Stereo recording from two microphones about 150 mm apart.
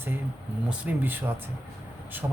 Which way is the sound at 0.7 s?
15° right (ahead or behind).